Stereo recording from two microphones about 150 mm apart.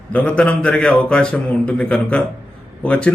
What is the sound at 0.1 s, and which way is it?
Speech, 10° left (ahead or behind).